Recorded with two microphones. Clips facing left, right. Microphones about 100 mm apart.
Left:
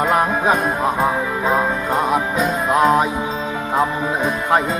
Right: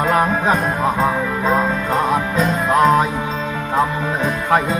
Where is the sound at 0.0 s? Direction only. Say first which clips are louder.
Even; 10° left (ahead or behind).